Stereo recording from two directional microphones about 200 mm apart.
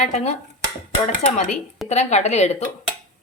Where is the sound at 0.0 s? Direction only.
35° left (ahead or behind).